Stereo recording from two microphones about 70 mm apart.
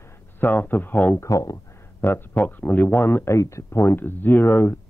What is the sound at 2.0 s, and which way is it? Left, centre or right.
Speech, left.